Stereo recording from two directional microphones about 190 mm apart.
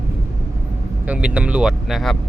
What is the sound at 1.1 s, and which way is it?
Speech, 5° right (ahead or behind).